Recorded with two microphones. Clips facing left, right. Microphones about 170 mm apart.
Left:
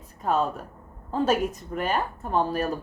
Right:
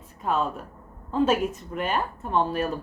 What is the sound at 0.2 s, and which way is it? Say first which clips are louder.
Speech: left 1 dB; 40° left (ahead or behind).